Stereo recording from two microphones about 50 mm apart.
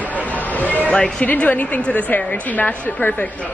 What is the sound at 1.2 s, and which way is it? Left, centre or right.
A woman's voice, left.